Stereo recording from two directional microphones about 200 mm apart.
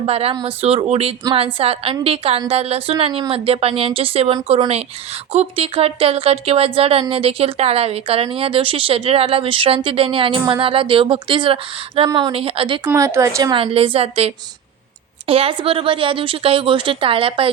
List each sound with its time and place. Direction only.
0.0 s speech: 30° right (ahead or behind)
12.9 s speech: 15° right (ahead or behind)